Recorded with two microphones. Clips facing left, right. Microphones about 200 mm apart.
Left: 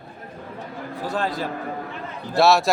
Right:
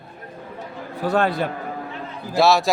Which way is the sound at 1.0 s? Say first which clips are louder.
Right 6 dB; 60° right (ahead or behind).